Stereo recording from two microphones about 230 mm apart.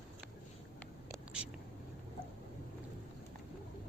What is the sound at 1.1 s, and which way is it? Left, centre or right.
Whispering, centre.